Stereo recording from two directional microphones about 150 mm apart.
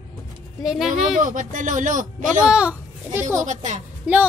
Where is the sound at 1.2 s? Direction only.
60° right (ahead or behind).